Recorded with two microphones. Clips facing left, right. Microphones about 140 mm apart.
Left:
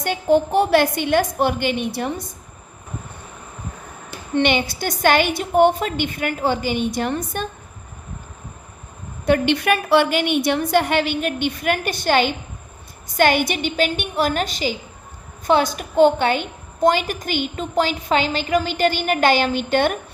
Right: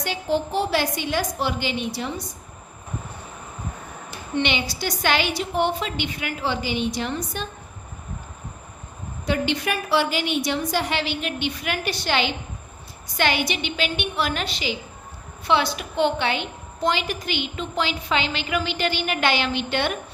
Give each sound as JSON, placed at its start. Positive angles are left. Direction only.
{"t": 0.0, "sound": "a woman's voice", "side_deg": 50}
{"t": 4.4, "sound": "a woman's voice", "side_deg": 50}
{"t": 9.2, "sound": "a woman's voice", "side_deg": 60}